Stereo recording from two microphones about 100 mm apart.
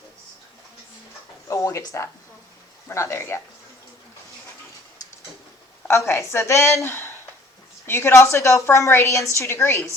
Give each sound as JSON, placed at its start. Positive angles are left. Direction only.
{"t": 1.5, "sound": "a sound", "side_deg": 30}
{"t": 2.9, "sound": "a woman's voice", "side_deg": 30}
{"t": 5.9, "sound": "a woman's voice", "side_deg": 25}